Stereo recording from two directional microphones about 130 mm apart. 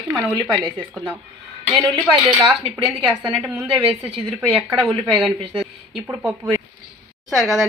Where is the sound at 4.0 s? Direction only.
45° right (ahead or behind).